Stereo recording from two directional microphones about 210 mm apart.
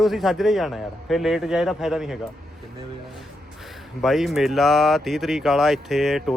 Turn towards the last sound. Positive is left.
turn(degrees=0)  # may be behind; listen again after turning